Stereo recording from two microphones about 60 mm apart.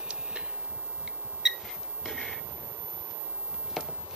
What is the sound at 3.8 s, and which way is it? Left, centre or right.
Walk, centre.